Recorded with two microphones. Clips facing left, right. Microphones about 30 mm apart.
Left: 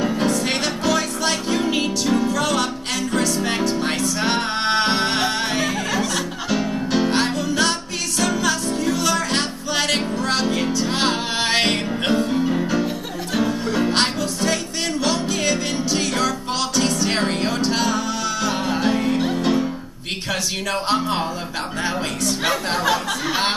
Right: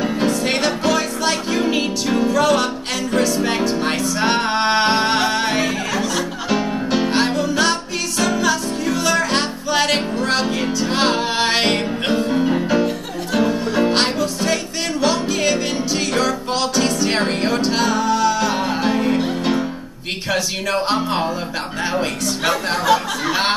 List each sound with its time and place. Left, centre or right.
0.0 s music: centre